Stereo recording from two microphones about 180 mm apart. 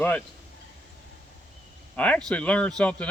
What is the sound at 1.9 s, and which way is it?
Speech, 10° left (ahead or behind).